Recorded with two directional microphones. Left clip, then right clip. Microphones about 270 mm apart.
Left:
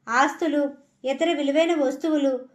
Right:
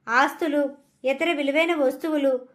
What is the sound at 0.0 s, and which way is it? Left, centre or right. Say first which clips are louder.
A woman's voice: even; right.